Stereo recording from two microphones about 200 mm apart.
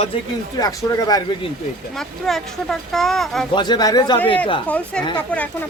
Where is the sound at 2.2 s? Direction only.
Centre (ahead or behind).